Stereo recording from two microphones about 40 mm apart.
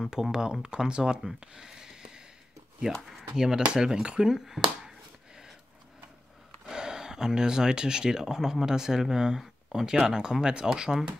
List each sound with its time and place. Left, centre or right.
0.1 s speech: centre
3.3 s speech: centre
4.3 s a sound: centre
6.7 s speech: centre